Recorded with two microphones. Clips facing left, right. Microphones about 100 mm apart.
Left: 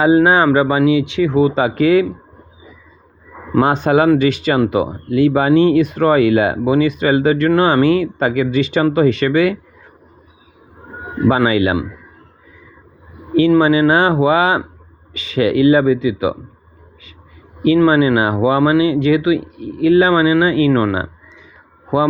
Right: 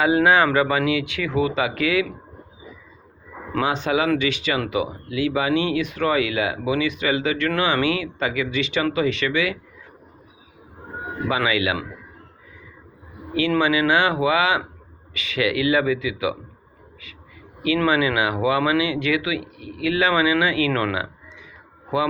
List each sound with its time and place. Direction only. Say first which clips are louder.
0.0 s speech: left 6 dB; 30° left (ahead or behind)
3.6 s speech: left 8 dB; 45° left (ahead or behind)
11.3 s speech: left 8 dB; 35° left (ahead or behind)
13.6 s speech: left 7 dB; 35° left (ahead or behind)
17.8 s speech: left 7 dB; 35° left (ahead or behind)